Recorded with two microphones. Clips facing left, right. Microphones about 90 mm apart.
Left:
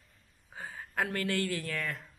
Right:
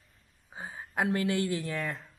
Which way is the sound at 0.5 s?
20° right (ahead or behind).